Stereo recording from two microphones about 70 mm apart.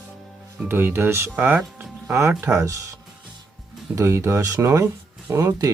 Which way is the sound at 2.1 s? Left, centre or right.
Right.